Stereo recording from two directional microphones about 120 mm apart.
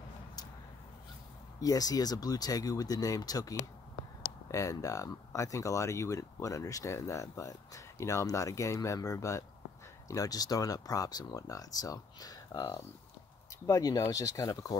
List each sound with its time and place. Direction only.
1.6 s speech: 30° left (ahead or behind)